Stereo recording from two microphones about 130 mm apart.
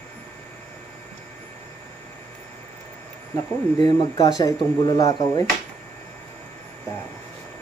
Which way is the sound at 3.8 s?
35° left (ahead or behind).